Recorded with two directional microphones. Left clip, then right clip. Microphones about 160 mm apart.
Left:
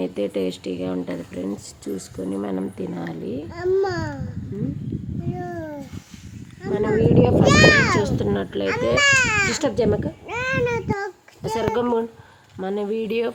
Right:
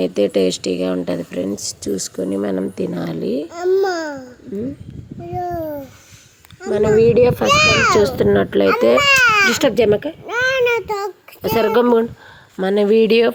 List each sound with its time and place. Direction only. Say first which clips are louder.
0.0 s a child's voice: right 8 dB; 20° right (ahead or behind)
3.6 s a child's voice: right 4 dB; 10° right (ahead or behind)
5.4 s a sound: right 10 dB; 10° right (ahead or behind)
6.6 s a child's voice: right 7 dB; 15° right (ahead or behind)
7.9 s a child's voice: right 9 dB; 30° right (ahead or behind)
9.0 s speech: right 1 dB; 10° right (ahead or behind)
9.5 s a child's voice: right 7 dB; 30° right (ahead or behind)
10.2 s a sound: right 7 dB; 10° right (ahead or behind)
11.4 s a child's voice: right 8 dB; 30° right (ahead or behind)